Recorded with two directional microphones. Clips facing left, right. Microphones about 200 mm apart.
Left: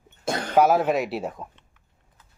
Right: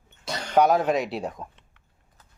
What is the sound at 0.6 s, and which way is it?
Speech, 5° left (ahead or behind).